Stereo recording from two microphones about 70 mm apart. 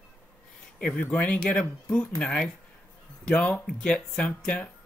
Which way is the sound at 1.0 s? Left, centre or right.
Centre.